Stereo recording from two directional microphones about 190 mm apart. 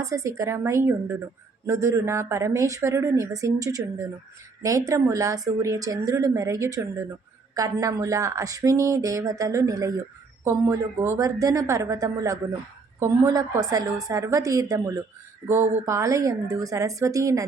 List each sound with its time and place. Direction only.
0.0 s speech: 15° right (ahead or behind)